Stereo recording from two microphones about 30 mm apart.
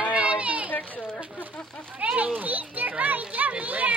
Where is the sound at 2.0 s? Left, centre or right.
Right.